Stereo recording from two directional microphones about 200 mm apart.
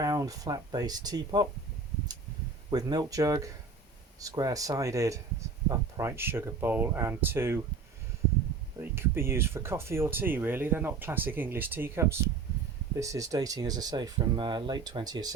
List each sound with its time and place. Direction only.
0.0 s speech: 15° right (ahead or behind)
2.6 s speech: 20° right (ahead or behind)
8.8 s speech: 10° right (ahead or behind)